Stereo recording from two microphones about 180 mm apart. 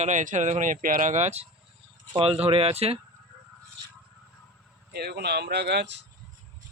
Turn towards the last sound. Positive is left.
turn(degrees=-75)  # may be behind; listen again after turning